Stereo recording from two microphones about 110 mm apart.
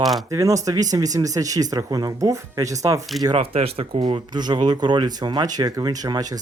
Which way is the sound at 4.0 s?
40° right (ahead or behind).